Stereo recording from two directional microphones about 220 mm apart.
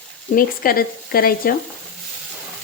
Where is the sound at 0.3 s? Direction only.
40° left (ahead or behind).